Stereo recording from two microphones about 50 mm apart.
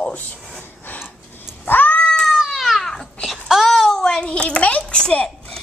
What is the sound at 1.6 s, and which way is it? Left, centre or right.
Cat, left.